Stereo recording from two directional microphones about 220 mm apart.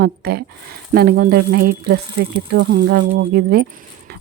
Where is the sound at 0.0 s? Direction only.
45° right (ahead or behind).